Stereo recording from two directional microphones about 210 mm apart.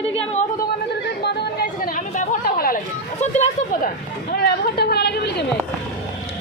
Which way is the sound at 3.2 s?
35° left (ahead or behind).